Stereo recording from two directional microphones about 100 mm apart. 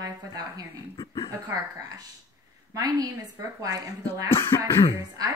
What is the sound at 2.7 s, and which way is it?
Speech, 40° right (ahead or behind).